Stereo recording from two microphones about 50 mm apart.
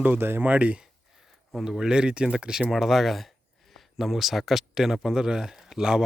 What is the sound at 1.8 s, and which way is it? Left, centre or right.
A man's voice, centre.